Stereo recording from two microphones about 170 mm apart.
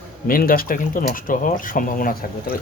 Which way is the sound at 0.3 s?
55° left (ahead or behind).